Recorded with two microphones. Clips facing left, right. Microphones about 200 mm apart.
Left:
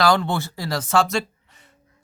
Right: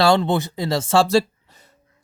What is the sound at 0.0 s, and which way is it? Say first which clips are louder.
Speech: right 3 dB; 25° right (ahead or behind).